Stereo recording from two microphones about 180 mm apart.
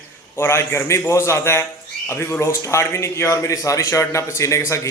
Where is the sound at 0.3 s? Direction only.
15° left (ahead or behind).